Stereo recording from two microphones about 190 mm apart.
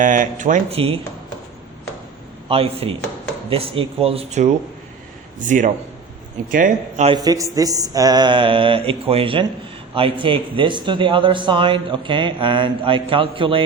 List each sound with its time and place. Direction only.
0.0 s speech: 40° right (ahead or behind)
2.5 s speech: 30° right (ahead or behind)
7.1 s a man's voice: 20° right (ahead or behind)